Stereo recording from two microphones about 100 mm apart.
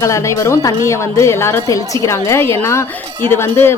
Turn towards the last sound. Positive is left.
turn(degrees=20)  # may be behind; listen again after turning